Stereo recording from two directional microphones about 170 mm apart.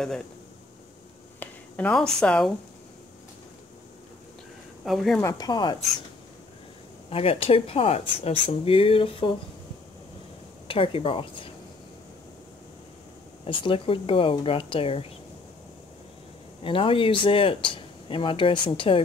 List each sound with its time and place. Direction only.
1.4 s speech: 5° left (ahead or behind)
4.8 s speech: centre (ahead or behind)
5.2 s speech: 25° left (ahead or behind)
7.1 s speech: 35° left (ahead or behind)
10.7 s speech: 30° left (ahead or behind)
13.5 s speech: 30° left (ahead or behind)
16.6 s speech: 30° left (ahead or behind)